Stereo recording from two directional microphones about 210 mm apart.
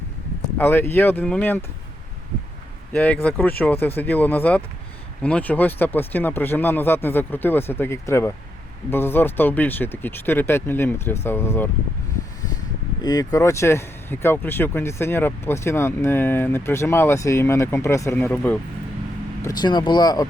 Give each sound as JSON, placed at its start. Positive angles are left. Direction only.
{"t": 0.6, "sound": "speech", "side_deg": 10}
{"t": 2.9, "sound": "speech", "side_deg": 5}
{"t": 13.0, "sound": "speech", "side_deg": 20}
{"t": 19.4, "sound": "speech", "side_deg": 20}